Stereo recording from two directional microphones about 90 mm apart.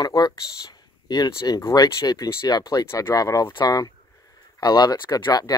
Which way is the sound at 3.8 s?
40° left (ahead or behind).